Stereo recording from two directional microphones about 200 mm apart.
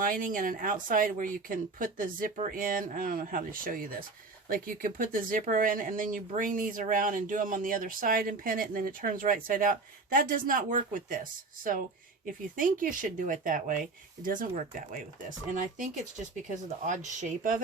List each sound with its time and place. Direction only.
0.0 s speech: 45° right (ahead or behind)
16.5 s speech: 40° right (ahead or behind)